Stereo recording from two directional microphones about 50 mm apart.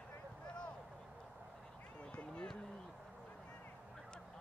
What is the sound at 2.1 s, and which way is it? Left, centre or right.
Speech, left.